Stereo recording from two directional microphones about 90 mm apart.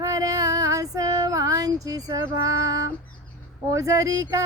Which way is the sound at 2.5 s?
40° right (ahead or behind).